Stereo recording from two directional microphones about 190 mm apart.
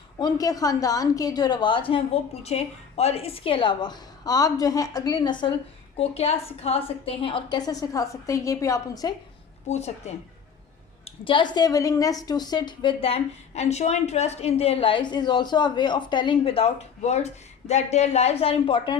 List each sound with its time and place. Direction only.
0.2 s a woman's voice: 20° left (ahead or behind)
9.6 s speech: 35° left (ahead or behind)
11.0 s a woman's voice: 25° left (ahead or behind)